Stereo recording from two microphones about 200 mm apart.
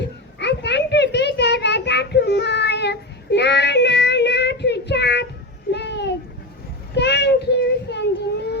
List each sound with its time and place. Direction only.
0.0 s children playing: 60° left (ahead or behind)
5.7 s a sound: 60° left (ahead or behind)
6.9 s child singing: 60° left (ahead or behind)